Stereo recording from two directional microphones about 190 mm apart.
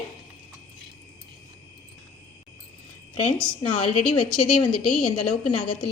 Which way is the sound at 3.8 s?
30° left (ahead or behind).